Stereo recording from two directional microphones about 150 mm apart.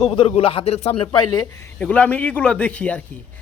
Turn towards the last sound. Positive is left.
turn(degrees=10)  # may be behind; listen again after turning